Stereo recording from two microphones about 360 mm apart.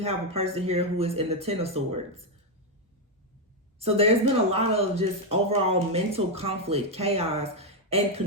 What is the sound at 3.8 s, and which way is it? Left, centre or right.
Speech, centre.